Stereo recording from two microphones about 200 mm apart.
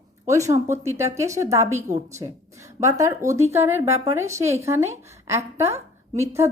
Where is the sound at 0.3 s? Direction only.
15° right (ahead or behind).